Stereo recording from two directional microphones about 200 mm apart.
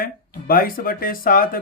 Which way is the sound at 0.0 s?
45° left (ahead or behind).